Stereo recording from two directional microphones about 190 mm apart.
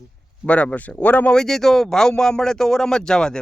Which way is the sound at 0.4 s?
5° left (ahead or behind).